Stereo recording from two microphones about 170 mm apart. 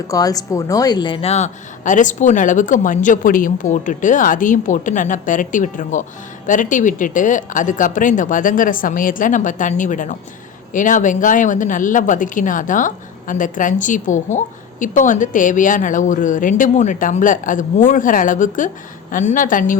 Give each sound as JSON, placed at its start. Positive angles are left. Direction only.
{"t": 0.1, "sound": "speech", "side_deg": 20}